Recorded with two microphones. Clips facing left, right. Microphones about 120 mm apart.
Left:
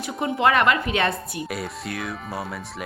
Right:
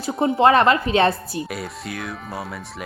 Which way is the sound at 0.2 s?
30° right (ahead or behind).